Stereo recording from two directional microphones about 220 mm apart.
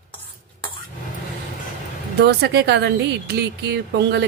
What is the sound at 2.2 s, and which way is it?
Speech, 50° right (ahead or behind).